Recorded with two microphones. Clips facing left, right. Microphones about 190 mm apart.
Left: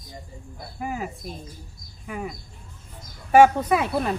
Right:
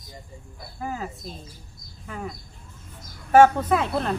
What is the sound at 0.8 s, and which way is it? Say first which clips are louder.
Speech: left 1 dB; 15° left (ahead or behind).